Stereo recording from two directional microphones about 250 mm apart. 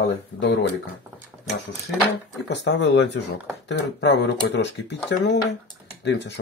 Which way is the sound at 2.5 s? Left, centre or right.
Left.